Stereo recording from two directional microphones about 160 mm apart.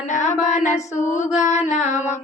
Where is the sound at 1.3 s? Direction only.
50° left (ahead or behind).